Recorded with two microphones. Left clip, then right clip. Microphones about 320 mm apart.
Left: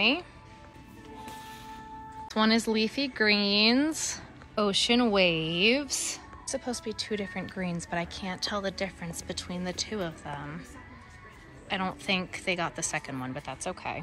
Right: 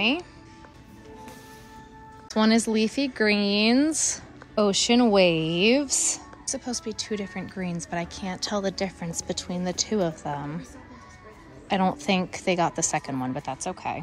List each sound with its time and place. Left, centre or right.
0.0 s speech: centre
2.2 s speech: centre
11.7 s speech: centre